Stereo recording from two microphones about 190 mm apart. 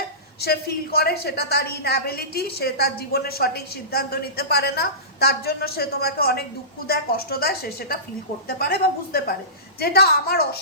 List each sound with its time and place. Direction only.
0.4 s a woman's voice: 55° left (ahead or behind)